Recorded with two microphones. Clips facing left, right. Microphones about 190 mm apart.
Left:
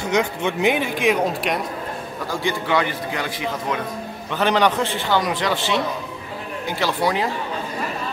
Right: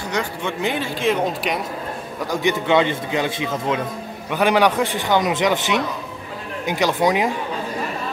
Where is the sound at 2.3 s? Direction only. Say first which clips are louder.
Right 4 dB; 20° right (ahead or behind).